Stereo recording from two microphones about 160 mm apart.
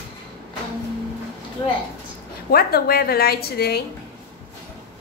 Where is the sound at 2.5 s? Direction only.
75° left (ahead or behind).